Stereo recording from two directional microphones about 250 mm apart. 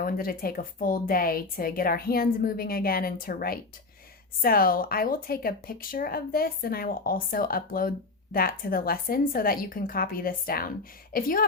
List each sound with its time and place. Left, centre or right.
0.0 s speech: left